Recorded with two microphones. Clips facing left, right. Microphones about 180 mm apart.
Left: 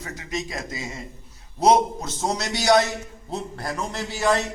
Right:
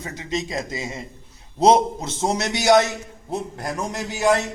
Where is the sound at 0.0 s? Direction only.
20° right (ahead or behind).